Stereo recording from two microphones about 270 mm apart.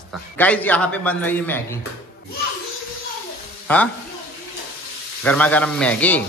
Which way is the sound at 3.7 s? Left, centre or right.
Centre.